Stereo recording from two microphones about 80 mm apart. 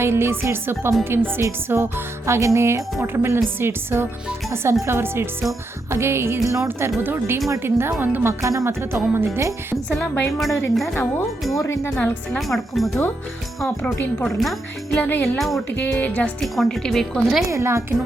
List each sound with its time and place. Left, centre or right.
0.0 s music: right
6.7 s speech: right
7.6 s music: right
10.3 s a woman's voice: centre
11.5 s speech: left
12.3 s a woman's voice: centre
14.3 s a woman's voice: centre
15.0 s speech: left
15.4 s a woman's voice: centre
15.8 s speech: left
16.4 s a woman's voice: centre
17.5 s music: right